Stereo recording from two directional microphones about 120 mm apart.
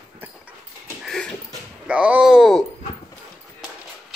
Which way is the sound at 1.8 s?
10° right (ahead or behind).